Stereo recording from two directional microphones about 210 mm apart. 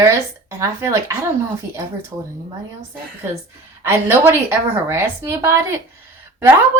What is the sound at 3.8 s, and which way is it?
A woman's voice, 10° right (ahead or behind).